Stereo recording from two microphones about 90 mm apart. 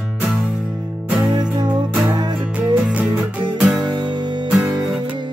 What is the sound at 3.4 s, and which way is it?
Music, 60° right (ahead or behind).